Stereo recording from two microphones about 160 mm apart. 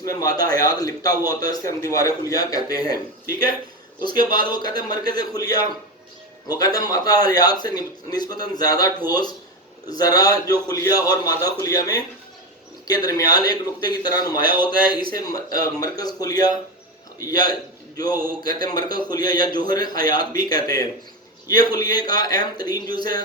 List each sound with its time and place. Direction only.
0.0 s a man's voice: 20° left (ahead or behind)
4.5 s a man's voice: 25° left (ahead or behind)